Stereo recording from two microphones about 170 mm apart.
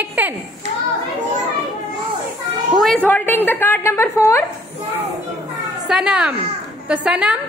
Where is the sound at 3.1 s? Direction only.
10° left (ahead or behind).